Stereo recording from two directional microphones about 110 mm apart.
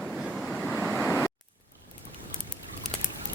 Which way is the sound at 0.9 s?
20° left (ahead or behind).